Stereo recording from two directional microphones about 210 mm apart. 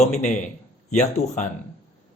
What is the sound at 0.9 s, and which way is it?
Speech, 35° left (ahead or behind).